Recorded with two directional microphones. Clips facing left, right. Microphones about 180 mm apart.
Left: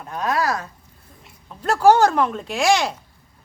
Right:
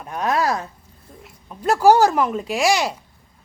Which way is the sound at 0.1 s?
20° right (ahead or behind).